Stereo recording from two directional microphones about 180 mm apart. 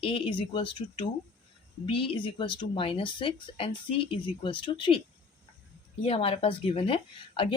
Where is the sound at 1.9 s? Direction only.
30° left (ahead or behind).